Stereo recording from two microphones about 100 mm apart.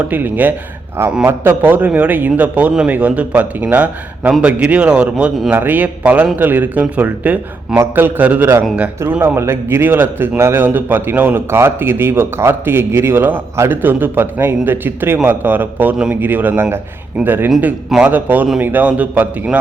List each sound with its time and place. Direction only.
0.1 s a man's voice: 15° right (ahead or behind)
17.8 s a man's voice: 5° right (ahead or behind)
18.1 s a man's voice: 15° right (ahead or behind)